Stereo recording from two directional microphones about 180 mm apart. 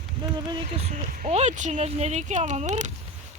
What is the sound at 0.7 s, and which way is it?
Speech, 40° right (ahead or behind).